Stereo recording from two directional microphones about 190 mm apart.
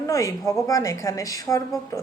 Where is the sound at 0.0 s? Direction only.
15° left (ahead or behind).